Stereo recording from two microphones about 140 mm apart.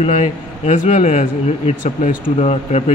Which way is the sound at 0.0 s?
60° left (ahead or behind).